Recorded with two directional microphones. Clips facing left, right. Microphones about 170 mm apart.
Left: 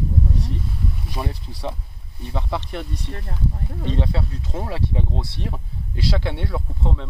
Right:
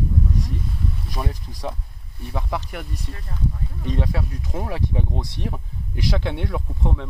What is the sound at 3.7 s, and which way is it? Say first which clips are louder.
Speech: left 2 dB; 70° left (ahead or behind).